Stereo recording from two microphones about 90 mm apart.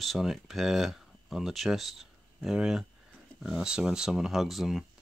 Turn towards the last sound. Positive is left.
turn(degrees=0)  # may be behind; listen again after turning